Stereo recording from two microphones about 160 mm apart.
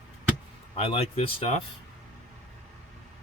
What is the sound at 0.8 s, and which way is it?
Speech, 40° left (ahead or behind).